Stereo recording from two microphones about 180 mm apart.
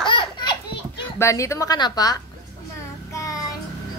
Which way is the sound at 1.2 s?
15° left (ahead or behind).